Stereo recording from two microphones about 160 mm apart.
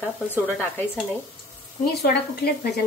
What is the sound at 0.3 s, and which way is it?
Speech, 15° left (ahead or behind).